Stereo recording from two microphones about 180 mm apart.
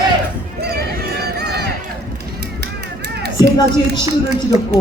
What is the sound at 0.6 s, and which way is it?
Music, 60° right (ahead or behind).